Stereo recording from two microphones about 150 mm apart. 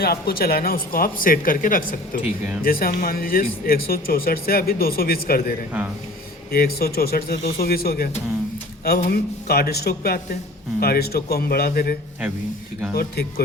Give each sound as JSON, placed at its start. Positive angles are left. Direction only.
{"t": 0.0, "sound": "speech", "side_deg": 90}
{"t": 13.0, "sound": "speech", "side_deg": 90}